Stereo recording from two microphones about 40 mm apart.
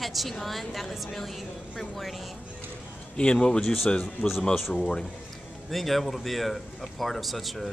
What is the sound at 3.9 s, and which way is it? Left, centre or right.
Speech, left.